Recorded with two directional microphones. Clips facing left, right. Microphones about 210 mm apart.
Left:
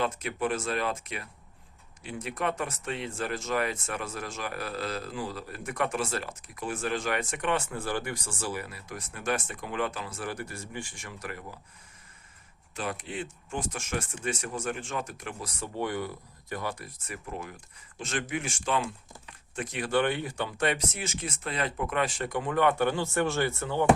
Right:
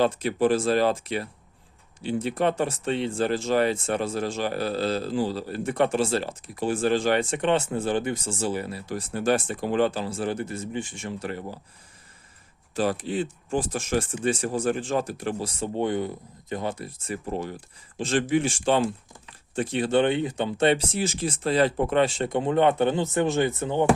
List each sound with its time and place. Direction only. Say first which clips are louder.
0.0 s speech: right 8 dB; 35° right (ahead or behind)
12.7 s speech: right 9 dB; 35° right (ahead or behind)